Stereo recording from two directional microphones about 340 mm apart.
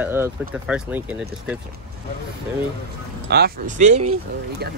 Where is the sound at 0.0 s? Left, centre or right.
Centre.